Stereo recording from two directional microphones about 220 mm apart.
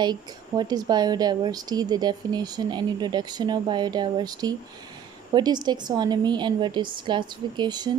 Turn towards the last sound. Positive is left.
turn(degrees=-20)  # may be behind; listen again after turning